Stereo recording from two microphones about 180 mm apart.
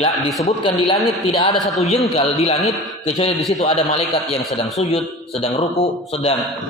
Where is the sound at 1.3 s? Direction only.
30° left (ahead or behind).